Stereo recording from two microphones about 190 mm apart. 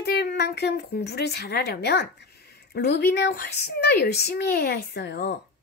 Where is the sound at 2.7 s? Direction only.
60° left (ahead or behind).